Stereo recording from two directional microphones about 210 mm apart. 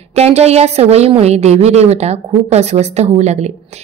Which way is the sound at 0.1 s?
30° right (ahead or behind).